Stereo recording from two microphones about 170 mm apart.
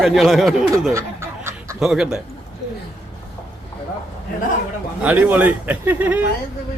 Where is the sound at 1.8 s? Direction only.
5° right (ahead or behind).